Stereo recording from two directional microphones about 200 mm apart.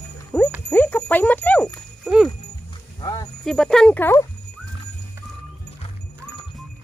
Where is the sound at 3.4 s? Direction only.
Centre (ahead or behind).